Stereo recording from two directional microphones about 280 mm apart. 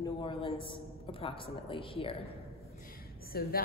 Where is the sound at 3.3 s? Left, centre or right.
Left.